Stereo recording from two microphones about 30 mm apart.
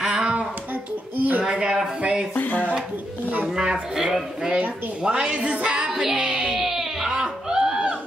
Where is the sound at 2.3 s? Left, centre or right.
Left.